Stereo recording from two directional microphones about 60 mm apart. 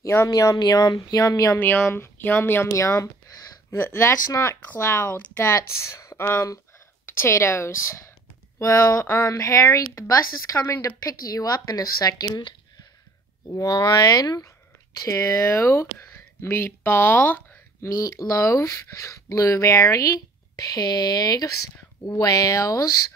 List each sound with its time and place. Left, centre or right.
0.3 s speech: left
1.6 s speech: left
2.7 s speech: left
3.7 s speech: left
5.7 s speech: left
6.1 s speech: left
9.0 s speech: left
9.4 s speech: left
11.1 s speech: left
13.5 s speech: left
15.0 s speech: left
17.8 s speech: left